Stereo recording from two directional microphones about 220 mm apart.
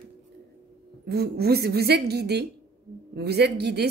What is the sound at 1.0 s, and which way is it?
Speech, 45° right (ahead or behind).